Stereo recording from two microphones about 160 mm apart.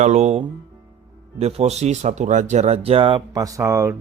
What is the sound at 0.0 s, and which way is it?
A man's voice, 45° right (ahead or behind).